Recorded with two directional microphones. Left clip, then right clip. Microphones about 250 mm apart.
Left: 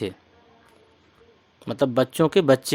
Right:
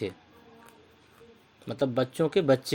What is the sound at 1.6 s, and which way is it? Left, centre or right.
Speech, left.